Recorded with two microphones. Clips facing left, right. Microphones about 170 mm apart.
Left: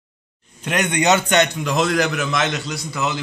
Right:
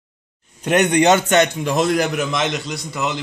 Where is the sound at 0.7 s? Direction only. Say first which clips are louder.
Right 4 dB; 40° right (ahead or behind).